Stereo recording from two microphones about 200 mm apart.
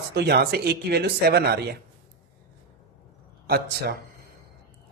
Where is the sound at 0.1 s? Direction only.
55° right (ahead or behind).